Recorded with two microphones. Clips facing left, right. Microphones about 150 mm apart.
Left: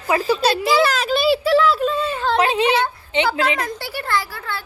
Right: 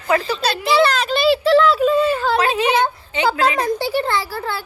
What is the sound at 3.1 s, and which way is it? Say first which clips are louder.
Speech: even; 25° left (ahead or behind).